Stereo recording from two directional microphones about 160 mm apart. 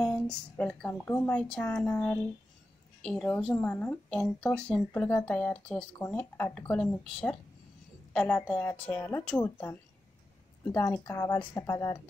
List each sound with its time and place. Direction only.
0.0 s a woman's voice: 5° left (ahead or behind); by 9.8 s 25° left (ahead or behind)
10.6 s a woman's voice: 15° left (ahead or behind)